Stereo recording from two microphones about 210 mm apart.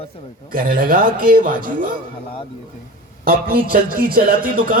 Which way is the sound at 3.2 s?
45° right (ahead or behind).